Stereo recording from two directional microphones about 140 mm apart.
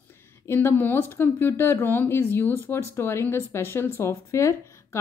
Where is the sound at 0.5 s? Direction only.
15° left (ahead or behind).